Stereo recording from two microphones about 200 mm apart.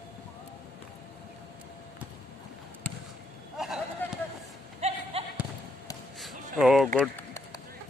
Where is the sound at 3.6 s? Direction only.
Centre (ahead or behind).